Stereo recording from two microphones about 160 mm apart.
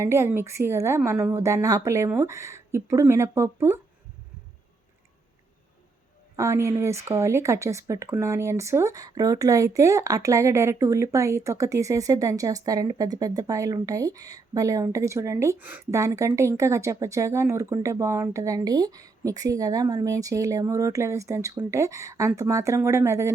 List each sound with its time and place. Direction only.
0.0 s a woman's voice: 15° right (ahead or behind)
6.3 s speech: 20° right (ahead or behind)